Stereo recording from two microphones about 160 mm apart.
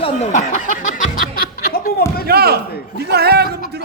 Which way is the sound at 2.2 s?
75° right (ahead or behind).